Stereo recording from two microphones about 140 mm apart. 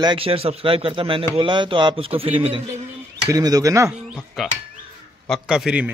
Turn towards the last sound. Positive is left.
turn(degrees=-5)  # may be behind; listen again after turning